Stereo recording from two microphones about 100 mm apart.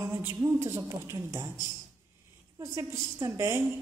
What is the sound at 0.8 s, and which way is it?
Speech, 35° right (ahead or behind).